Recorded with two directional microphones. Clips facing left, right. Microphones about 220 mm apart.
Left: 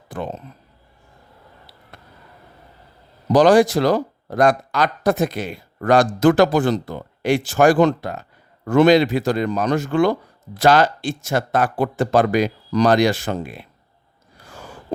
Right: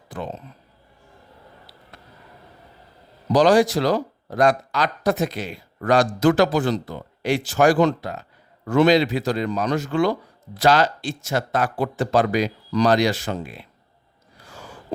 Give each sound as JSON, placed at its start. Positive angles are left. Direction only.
{"t": 0.1, "sound": "speech", "side_deg": 55}
{"t": 3.3, "sound": "speech", "side_deg": 50}